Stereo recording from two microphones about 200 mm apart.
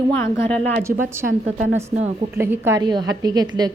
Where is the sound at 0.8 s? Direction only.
10° right (ahead or behind).